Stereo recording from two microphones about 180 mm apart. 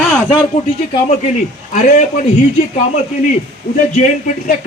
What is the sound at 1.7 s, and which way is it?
Speech, 45° left (ahead or behind).